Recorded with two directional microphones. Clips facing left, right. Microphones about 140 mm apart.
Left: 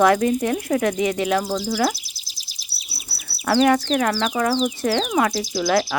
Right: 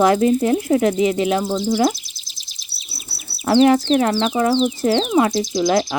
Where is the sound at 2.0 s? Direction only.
5° left (ahead or behind).